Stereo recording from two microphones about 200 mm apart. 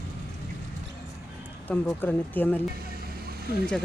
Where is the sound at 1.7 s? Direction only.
10° left (ahead or behind).